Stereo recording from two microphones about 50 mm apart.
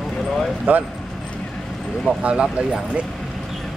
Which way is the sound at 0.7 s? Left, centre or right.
Right.